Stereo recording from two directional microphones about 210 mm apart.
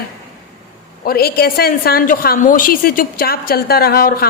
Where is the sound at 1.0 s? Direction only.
45° left (ahead or behind).